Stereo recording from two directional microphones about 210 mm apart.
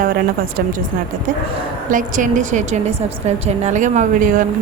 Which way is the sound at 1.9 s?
40° right (ahead or behind).